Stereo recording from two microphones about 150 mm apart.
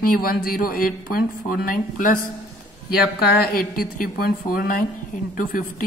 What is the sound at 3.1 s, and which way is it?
A woman's voice, 90° left.